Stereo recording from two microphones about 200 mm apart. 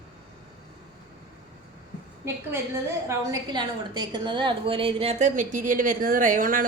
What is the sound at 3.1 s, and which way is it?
A woman's voice, 20° right (ahead or behind).